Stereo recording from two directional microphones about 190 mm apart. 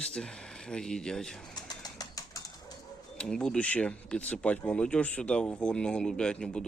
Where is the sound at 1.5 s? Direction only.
20° left (ahead or behind).